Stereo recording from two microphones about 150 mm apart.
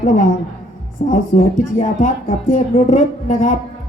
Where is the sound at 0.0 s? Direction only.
55° left (ahead or behind).